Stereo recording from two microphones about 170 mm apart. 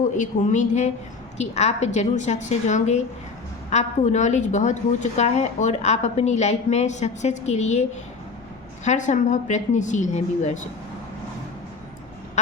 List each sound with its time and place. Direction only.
0.2 s a woman's voice: 45° left (ahead or behind)